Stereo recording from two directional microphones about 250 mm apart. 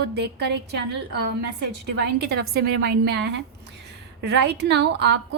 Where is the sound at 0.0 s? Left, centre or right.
Right.